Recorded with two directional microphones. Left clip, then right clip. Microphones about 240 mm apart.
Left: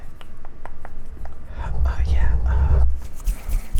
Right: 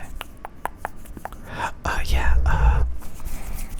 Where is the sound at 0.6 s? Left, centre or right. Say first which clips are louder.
Right 11 dB; right.